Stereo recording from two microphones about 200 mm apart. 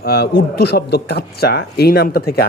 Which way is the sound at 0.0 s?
50° left (ahead or behind).